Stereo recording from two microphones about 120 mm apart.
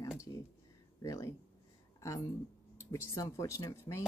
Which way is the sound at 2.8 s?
25° left (ahead or behind).